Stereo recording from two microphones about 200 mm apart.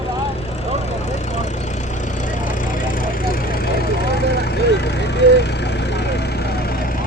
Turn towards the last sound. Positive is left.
turn(degrees=50)  # may be behind; listen again after turning